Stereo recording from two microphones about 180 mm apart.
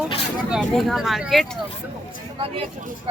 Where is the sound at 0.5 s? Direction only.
Centre (ahead or behind).